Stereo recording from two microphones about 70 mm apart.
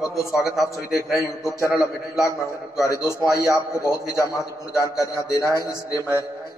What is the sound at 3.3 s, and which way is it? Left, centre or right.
A man's voice, left.